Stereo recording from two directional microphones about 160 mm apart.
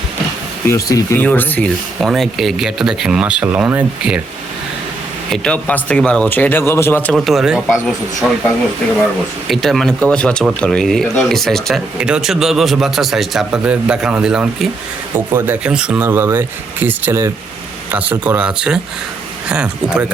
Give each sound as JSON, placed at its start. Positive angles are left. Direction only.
{"t": 0.7, "sound": "speech", "side_deg": 20}
{"t": 5.3, "sound": "speech", "side_deg": 5}
{"t": 7.3, "sound": "speech", "side_deg": -5}
{"t": 9.5, "sound": "speech", "side_deg": 0}